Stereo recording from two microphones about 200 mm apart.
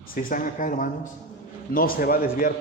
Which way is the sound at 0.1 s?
45° left (ahead or behind).